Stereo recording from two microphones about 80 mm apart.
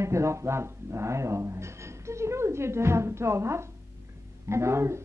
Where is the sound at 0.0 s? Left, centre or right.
Right.